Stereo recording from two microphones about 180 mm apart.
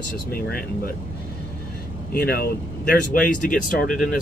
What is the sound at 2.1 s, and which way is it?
Speech, 55° left (ahead or behind).